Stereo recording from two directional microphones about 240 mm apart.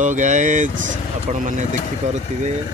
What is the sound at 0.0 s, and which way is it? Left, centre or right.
Speech, right.